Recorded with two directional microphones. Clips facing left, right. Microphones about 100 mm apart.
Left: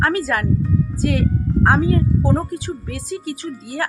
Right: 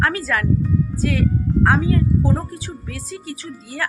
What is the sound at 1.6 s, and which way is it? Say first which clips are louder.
A woman's voice: left 2 dB; 40° left (ahead or behind).